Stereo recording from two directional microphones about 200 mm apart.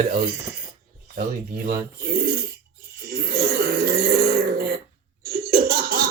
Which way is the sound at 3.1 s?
45° right (ahead or behind).